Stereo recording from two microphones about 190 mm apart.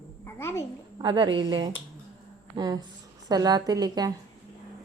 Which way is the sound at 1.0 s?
25° right (ahead or behind).